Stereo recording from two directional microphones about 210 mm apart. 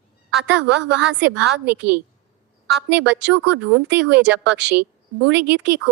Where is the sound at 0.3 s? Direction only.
55° right (ahead or behind).